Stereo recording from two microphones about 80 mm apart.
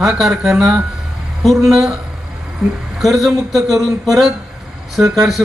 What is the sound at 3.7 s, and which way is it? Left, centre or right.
Speech, right.